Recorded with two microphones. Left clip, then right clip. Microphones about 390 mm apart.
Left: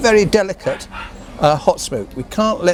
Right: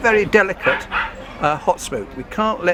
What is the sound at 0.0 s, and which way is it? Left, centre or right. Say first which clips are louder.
Speech: left 1 dB; left.